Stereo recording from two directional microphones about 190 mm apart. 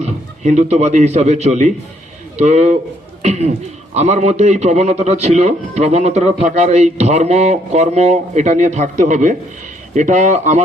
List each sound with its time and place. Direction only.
0.0 s a man's voice: 35° right (ahead or behind)